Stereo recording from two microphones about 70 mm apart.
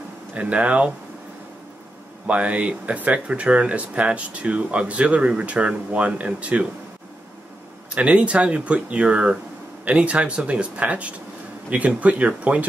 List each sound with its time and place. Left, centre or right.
0.3 s speech: centre
2.2 s speech: centre
7.9 s speech: centre